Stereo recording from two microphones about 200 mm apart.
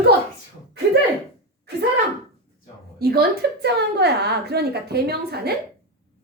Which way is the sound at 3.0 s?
50° right (ahead or behind).